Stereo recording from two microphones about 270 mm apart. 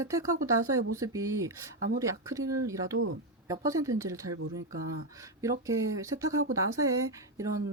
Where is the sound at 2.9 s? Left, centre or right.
Right.